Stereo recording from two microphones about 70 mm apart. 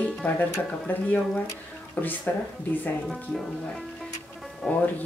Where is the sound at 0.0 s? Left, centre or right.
Left.